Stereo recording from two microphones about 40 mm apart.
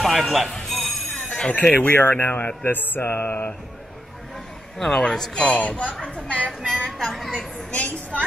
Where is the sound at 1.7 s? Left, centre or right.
Left.